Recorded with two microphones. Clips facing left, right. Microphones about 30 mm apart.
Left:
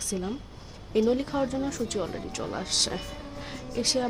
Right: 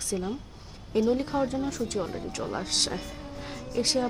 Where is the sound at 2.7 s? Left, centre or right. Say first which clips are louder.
Left 1 dB; right.